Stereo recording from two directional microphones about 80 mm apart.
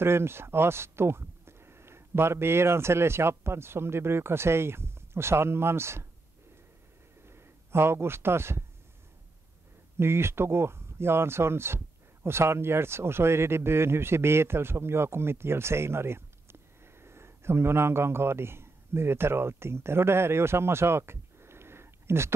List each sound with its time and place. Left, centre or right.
0.0 s speech: right
7.2 s speech: right
9.9 s a man's voice: right